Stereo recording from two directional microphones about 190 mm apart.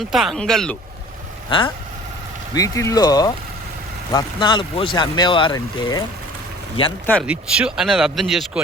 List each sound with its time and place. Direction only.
0.0 s speech: centre (ahead or behind)
1.5 s speech: 25° left (ahead or behind)
7.3 s speech: 5° right (ahead or behind)